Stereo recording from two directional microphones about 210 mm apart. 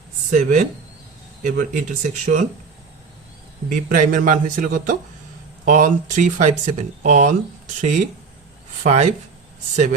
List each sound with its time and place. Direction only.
0.3 s speech: 40° right (ahead or behind)
3.7 s speech: 40° right (ahead or behind)